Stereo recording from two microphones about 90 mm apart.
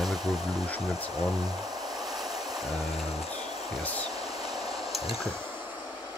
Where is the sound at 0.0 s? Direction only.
Centre (ahead or behind).